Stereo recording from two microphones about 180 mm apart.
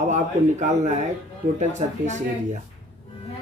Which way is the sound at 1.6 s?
40° right (ahead or behind).